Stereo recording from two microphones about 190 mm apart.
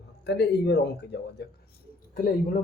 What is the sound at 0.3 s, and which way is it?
Speech, 60° left (ahead or behind).